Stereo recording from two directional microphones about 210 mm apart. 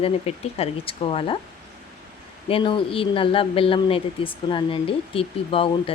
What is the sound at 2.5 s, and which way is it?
Speech, 25° left (ahead or behind).